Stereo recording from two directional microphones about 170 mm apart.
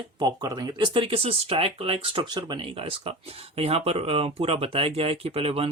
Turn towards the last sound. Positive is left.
turn(degrees=-35)  # may be behind; listen again after turning